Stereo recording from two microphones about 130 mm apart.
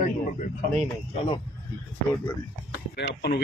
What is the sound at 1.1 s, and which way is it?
Speech, 45° left (ahead or behind).